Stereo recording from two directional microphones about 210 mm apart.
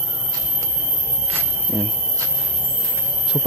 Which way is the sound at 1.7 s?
Centre (ahead or behind).